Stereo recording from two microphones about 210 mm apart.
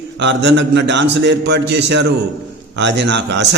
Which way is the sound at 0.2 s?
55° right (ahead or behind).